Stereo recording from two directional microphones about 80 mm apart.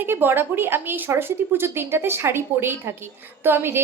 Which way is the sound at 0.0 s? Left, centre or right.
Right.